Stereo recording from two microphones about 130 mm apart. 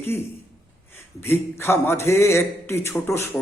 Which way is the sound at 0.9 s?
15° left (ahead or behind).